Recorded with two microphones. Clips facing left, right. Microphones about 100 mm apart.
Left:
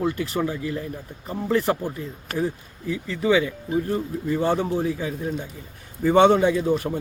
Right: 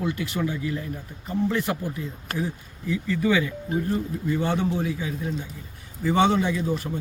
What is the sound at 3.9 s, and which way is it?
Speech, 35° left (ahead or behind).